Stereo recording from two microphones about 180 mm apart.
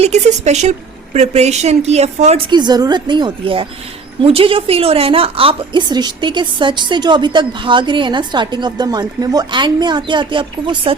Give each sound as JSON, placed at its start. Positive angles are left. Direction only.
{"t": 0.0, "sound": "a woman's voice", "side_deg": -40}
{"t": 2.5, "sound": "a woman's voice", "side_deg": -25}